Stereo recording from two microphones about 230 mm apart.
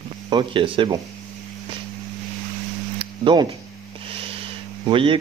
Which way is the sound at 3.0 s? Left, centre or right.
Right.